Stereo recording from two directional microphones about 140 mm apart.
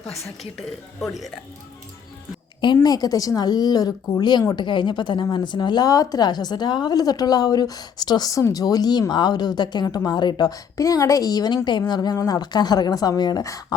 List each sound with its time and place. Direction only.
2.8 s a woman's voice: 25° left (ahead or behind)